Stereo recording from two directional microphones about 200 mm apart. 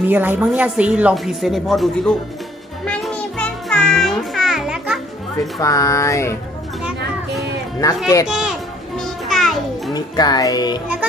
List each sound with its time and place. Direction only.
0.1 s a woman's voice: 10° right (ahead or behind)
2.8 s music: 5° left (ahead or behind)
5.5 s speech: 15° left (ahead or behind)
7.8 s speech: 15° left (ahead or behind)
8.3 s speech: 5° right (ahead or behind)
9.0 s music: centre (ahead or behind)
9.9 s music: 20° left (ahead or behind)